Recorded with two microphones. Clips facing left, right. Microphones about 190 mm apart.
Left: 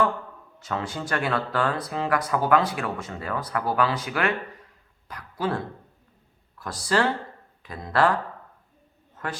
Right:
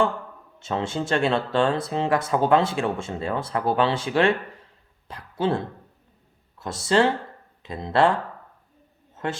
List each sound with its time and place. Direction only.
0.6 s speech: 25° right (ahead or behind)
9.2 s speech: 25° right (ahead or behind)